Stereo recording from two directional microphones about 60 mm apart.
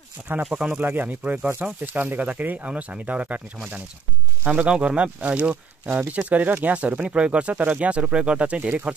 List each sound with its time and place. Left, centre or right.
0.3 s speech: right
4.5 s speech: centre